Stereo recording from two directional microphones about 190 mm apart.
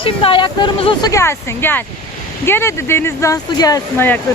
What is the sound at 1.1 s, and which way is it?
Speech, 15° left (ahead or behind).